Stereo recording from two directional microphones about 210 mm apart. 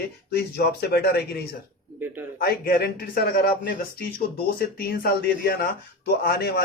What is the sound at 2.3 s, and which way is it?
Speech, 45° left (ahead or behind).